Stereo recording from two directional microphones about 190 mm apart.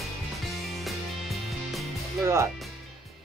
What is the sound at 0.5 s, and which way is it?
Music, centre (ahead or behind).